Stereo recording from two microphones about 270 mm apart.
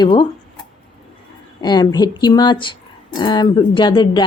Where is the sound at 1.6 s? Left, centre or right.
Centre.